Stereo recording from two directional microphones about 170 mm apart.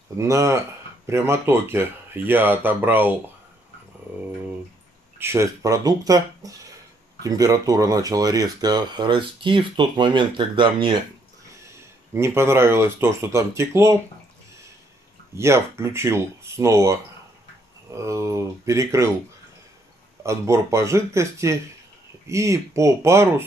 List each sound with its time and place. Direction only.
0.2 s speech: 20° right (ahead or behind)
5.2 s speech: 15° right (ahead or behind)
12.1 s speech: 15° right (ahead or behind)
15.3 s speech: 15° right (ahead or behind)
20.2 s speech: 15° right (ahead or behind)